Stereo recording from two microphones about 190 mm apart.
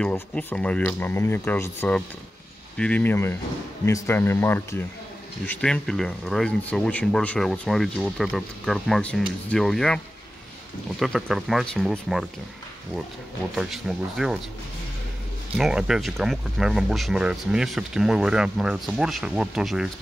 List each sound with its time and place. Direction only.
0.0 s speech: 5° left (ahead or behind)
11.0 s speech: centre (ahead or behind)
13.6 s speech: 5° right (ahead or behind)
15.5 s speech: 5° right (ahead or behind)